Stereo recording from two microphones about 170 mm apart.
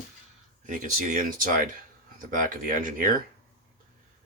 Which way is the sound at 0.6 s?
50° right (ahead or behind).